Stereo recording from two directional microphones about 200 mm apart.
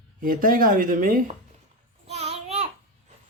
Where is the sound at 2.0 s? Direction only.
30° right (ahead or behind).